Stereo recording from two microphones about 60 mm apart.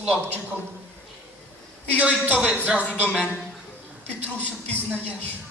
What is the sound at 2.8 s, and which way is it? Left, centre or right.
Speech, left.